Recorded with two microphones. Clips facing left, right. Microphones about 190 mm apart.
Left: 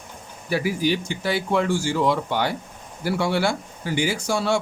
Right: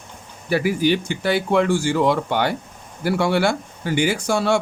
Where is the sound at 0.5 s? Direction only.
60° right (ahead or behind).